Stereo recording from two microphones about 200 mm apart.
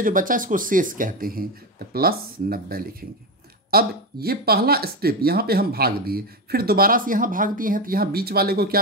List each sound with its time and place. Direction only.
0.0 s speech: 45° right (ahead or behind)